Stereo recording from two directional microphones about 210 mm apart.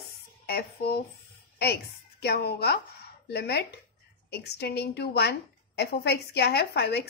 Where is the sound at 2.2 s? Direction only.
50° left (ahead or behind).